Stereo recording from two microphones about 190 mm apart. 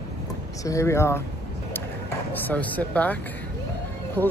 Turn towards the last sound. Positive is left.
turn(degrees=10)  # may be behind; listen again after turning